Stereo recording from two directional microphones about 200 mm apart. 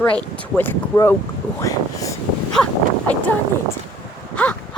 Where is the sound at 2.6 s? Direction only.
5° left (ahead or behind).